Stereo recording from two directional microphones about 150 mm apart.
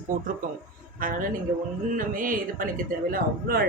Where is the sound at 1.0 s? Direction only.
65° right (ahead or behind).